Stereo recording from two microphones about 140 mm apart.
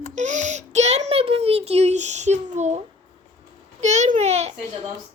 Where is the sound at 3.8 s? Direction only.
55° right (ahead or behind).